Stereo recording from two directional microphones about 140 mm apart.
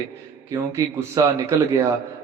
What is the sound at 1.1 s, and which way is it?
Speech, 20° right (ahead or behind).